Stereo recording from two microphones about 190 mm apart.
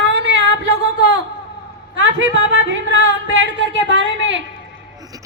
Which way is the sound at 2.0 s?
85° right.